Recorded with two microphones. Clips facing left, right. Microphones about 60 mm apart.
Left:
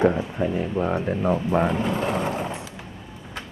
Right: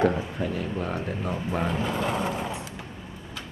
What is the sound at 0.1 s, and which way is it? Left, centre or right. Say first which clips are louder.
Speech: left 3 dB; centre.